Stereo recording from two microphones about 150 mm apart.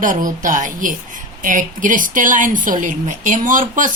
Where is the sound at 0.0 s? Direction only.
60° right (ahead or behind).